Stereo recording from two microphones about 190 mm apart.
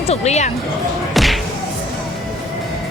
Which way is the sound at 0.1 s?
35° left (ahead or behind).